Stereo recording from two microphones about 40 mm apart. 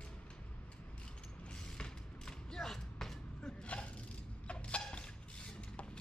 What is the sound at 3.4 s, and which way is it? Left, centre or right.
Gasp, centre.